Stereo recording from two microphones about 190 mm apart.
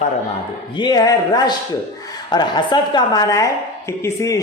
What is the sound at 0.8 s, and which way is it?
A woman's voice, 20° left (ahead or behind).